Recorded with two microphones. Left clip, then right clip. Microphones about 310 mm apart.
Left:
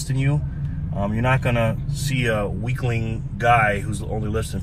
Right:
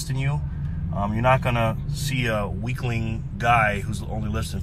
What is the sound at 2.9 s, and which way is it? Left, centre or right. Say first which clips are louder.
Speech: left 3 dB; centre.